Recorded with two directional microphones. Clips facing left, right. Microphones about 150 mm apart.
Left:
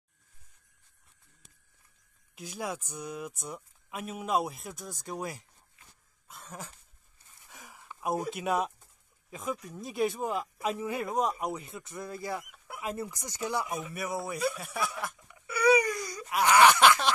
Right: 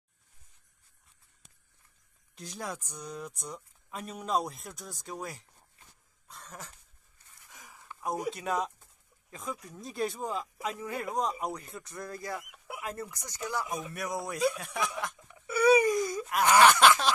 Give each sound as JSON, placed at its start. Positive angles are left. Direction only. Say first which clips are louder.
{"t": 2.3, "sound": "speech", "louder": "left 3 dB", "side_deg": 5}
{"t": 6.2, "sound": "cough", "louder": "left 2 dB", "side_deg": 5}
{"t": 7.4, "sound": "a sound", "louder": "left 1 dB", "side_deg": 20}
{"t": 8.3, "sound": "speech", "louder": "left 2 dB", "side_deg": 10}
{"t": 11.1, "sound": "speech", "louder": "left 1 dB", "side_deg": 5}
{"t": 11.5, "sound": "speech", "louder": "left 2 dB", "side_deg": 20}
{"t": 12.4, "sound": "chicken", "louder": "even", "side_deg": -5}
{"t": 12.8, "sound": "speech", "louder": "left 4 dB", "side_deg": 15}
{"t": 15.4, "sound": "wail", "louder": "right 2 dB", "side_deg": -25}
{"t": 16.5, "sound": "speech", "louder": "even", "side_deg": 15}